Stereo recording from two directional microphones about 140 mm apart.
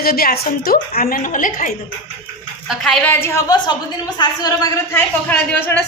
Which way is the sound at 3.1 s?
20° left (ahead or behind).